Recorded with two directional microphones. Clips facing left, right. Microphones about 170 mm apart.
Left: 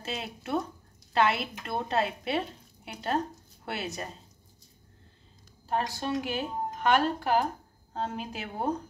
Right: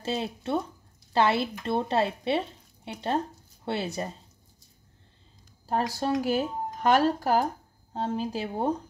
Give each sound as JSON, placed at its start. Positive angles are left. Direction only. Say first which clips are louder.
{"t": 0.0, "sound": "speech", "louder": "right 6 dB", "side_deg": -30}
{"t": 5.7, "sound": "speech", "louder": "right 3 dB", "side_deg": -35}